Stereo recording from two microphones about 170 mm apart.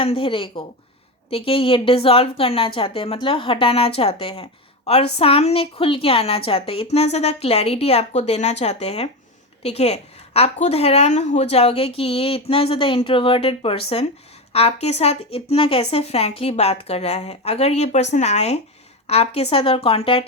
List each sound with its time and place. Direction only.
0.0 s a woman's voice: 30° left (ahead or behind)